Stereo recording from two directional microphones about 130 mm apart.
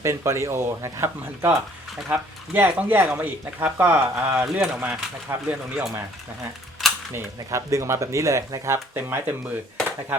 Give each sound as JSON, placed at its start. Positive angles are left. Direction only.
{"t": 0.0, "sound": "speech", "side_deg": -20}
{"t": 7.1, "sound": "speech", "side_deg": -20}